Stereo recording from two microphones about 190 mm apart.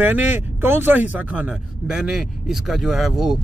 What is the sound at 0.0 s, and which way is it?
Speech, 10° right (ahead or behind).